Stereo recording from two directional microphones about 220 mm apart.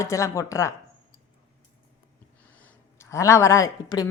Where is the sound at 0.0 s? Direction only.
15° left (ahead or behind).